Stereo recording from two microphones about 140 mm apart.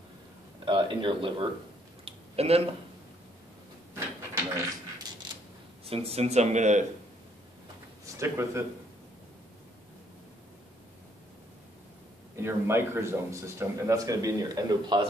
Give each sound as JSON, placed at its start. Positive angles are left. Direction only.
{"t": 0.7, "sound": "speech", "side_deg": -35}
{"t": 2.0, "sound": "a sound", "side_deg": -45}
{"t": 5.3, "sound": "a sound", "side_deg": -35}
{"t": 5.9, "sound": "speech", "side_deg": -45}
{"t": 8.2, "sound": "a man's voice", "side_deg": -20}
{"t": 12.4, "sound": "a man's voice", "side_deg": -20}